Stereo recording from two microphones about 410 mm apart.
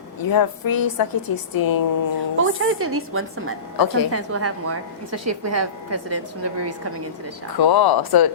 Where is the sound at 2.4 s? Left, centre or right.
Right.